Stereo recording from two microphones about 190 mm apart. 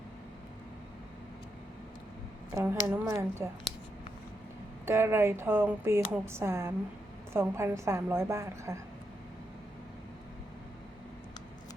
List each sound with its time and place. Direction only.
2.6 s speech: 15° right (ahead or behind)
4.9 s speech: 10° right (ahead or behind)